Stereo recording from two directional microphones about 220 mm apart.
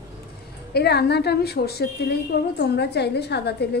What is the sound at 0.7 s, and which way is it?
Speech, 45° left (ahead or behind).